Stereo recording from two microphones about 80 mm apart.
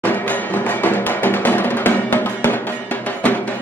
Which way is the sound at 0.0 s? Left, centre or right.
Left.